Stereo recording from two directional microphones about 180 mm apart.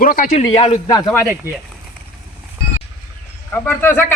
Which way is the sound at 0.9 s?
15° left (ahead or behind).